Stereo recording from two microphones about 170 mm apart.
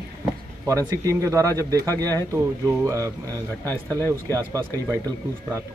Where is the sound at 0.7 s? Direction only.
20° right (ahead or behind).